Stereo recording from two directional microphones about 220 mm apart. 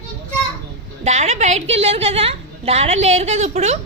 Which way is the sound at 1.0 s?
30° right (ahead or behind).